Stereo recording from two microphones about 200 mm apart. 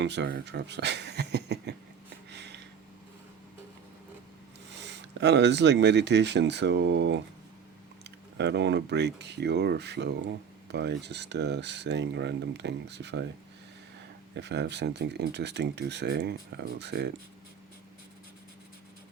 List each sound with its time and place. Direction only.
0.0 s speech: 60° right (ahead or behind)
2.3 s a sound: 60° right (ahead or behind)
4.8 s speech: 60° right (ahead or behind)
14.3 s speech: 55° right (ahead or behind)